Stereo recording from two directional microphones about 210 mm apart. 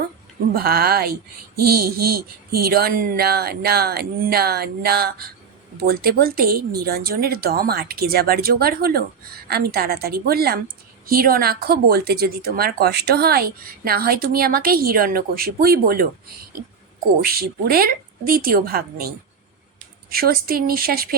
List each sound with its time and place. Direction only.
0.5 s speech: 45° right (ahead or behind)
17.2 s speech: 45° right (ahead or behind)